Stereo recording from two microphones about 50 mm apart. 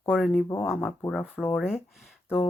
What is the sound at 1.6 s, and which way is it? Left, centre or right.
Speech, centre.